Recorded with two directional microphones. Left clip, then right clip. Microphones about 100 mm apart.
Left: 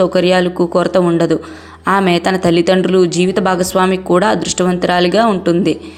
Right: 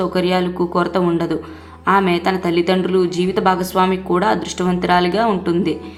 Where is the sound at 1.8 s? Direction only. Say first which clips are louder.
Left 2 dB; 65° left (ahead or behind).